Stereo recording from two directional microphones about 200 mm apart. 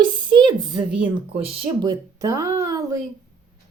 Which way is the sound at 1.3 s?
25° right (ahead or behind).